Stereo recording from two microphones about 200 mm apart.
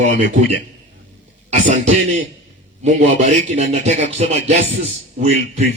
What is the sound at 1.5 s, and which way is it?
Speech, 35° right (ahead or behind).